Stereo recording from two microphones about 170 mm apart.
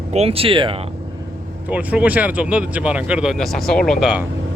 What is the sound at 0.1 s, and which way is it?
Speech, 35° right (ahead or behind).